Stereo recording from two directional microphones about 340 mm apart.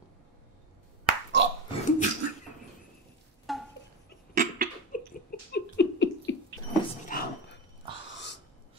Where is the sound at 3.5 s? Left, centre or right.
Centre.